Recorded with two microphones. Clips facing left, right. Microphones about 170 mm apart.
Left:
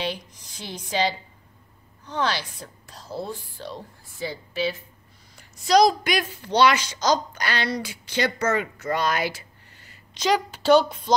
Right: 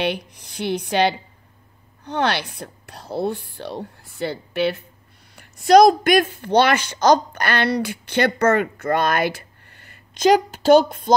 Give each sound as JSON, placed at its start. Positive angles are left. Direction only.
{"t": 0.0, "sound": "a woman's voice", "side_deg": -65}